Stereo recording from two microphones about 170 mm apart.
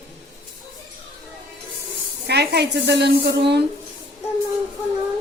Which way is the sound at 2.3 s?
75° right (ahead or behind).